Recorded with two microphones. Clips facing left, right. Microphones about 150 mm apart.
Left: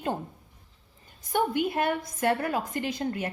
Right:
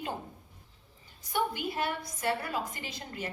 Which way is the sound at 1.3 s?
55° left (ahead or behind).